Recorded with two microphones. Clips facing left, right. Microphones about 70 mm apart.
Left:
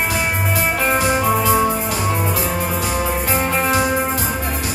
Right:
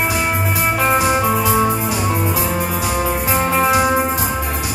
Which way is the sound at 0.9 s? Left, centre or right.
Centre.